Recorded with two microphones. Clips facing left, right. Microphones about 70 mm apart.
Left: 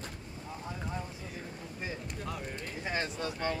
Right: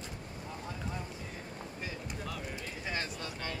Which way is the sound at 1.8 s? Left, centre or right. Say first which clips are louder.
Left 3 dB; left.